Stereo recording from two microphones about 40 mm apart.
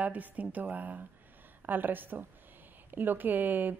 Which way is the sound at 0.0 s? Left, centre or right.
Right.